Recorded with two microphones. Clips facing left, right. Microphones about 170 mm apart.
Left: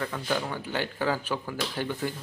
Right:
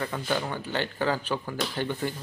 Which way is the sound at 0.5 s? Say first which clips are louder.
Right 1 dB; 10° left (ahead or behind).